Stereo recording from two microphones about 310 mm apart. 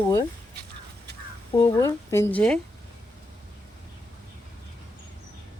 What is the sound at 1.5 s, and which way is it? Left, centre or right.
A woman's voice, centre.